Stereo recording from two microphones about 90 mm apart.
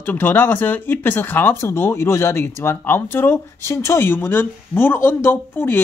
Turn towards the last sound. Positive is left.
turn(degrees=25)  # may be behind; listen again after turning